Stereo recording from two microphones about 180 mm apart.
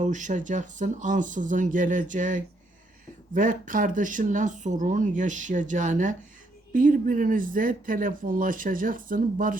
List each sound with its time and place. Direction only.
0.0 s speech: 45° right (ahead or behind)